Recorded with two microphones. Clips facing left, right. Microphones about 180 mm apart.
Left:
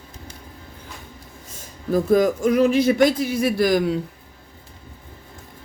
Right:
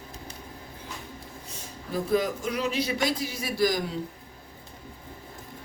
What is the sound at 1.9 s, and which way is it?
A man's voice, 45° left (ahead or behind).